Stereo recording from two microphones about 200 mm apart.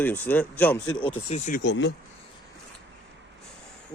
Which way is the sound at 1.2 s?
35° left (ahead or behind).